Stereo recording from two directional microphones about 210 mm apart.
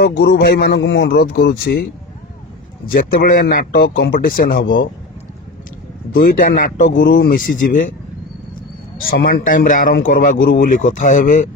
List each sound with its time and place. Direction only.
0.0 s speech: 50° left (ahead or behind)
2.9 s speech: 45° left (ahead or behind)
6.1 s speech: 45° left (ahead or behind)
9.0 s speech: 45° left (ahead or behind)